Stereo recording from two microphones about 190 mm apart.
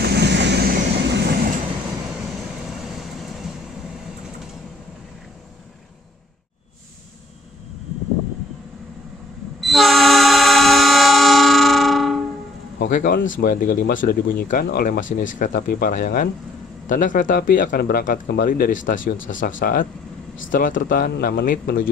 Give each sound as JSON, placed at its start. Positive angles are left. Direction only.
{"t": 0.0, "sound": "vehicle", "side_deg": -60}
{"t": 2.8, "sound": "vehicle", "side_deg": 0}
{"t": 9.6, "sound": "train", "side_deg": 0}
{"t": 12.7, "sound": "speech", "side_deg": 50}